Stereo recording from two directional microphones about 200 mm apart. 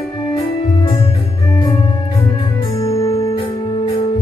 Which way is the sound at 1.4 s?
15° left (ahead or behind).